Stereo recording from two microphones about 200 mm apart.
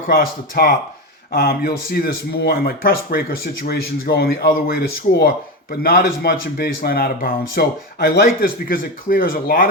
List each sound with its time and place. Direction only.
0.1 s speech: 50° left (ahead or behind)